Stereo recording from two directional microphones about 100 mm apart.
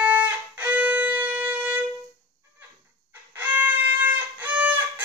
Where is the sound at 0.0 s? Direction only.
15° right (ahead or behind).